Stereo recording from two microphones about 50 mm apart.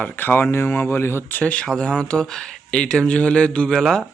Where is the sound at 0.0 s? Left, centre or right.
Left.